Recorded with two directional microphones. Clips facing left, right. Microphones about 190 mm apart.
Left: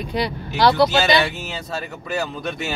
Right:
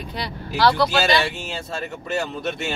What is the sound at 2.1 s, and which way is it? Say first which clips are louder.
Speech: even; centre (ahead or behind).